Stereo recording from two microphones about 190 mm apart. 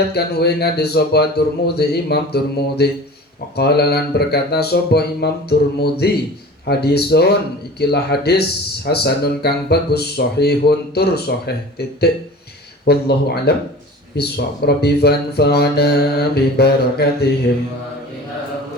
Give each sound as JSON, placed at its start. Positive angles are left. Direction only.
{"t": 0.1, "sound": "speech", "side_deg": 60}